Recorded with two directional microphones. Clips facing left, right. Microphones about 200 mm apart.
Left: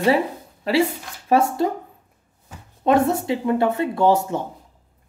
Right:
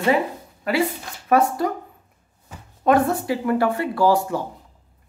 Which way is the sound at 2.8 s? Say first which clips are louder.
Even; 25° left (ahead or behind).